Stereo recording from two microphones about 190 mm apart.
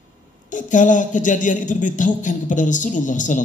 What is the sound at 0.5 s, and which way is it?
A man's voice, 40° left (ahead or behind).